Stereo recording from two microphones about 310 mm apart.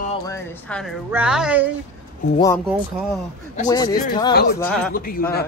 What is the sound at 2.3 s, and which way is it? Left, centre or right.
Speech, centre.